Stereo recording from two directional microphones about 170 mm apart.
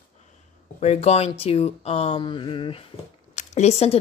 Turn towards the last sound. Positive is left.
turn(degrees=40)  # may be behind; listen again after turning